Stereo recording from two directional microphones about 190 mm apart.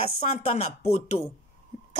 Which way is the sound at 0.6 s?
35° left (ahead or behind).